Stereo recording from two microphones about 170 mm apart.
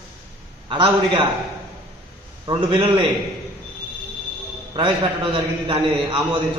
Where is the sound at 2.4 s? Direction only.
25° right (ahead or behind).